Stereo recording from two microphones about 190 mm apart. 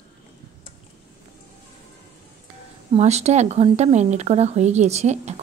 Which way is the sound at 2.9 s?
35° right (ahead or behind).